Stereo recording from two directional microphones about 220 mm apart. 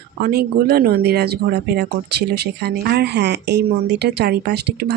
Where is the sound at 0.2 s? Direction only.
45° right (ahead or behind).